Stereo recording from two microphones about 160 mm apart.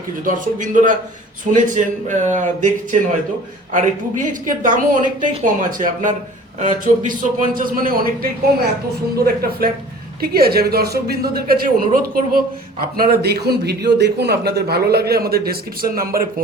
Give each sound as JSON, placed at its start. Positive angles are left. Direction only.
{"t": 0.3, "sound": "a woman's voice", "side_deg": -55}
{"t": 3.7, "sound": "a woman's voice", "side_deg": -50}
{"t": 9.2, "sound": "speech", "side_deg": -70}
{"t": 13.0, "sound": "a man's voice", "side_deg": -75}